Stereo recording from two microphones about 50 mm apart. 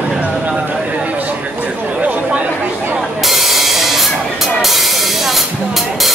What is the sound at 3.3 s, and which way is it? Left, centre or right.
Music, centre.